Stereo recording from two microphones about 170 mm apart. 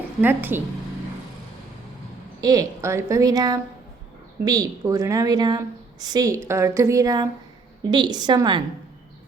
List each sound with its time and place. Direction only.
0.2 s a woman's voice: 10° right (ahead or behind)
2.4 s a woman's voice: 20° right (ahead or behind)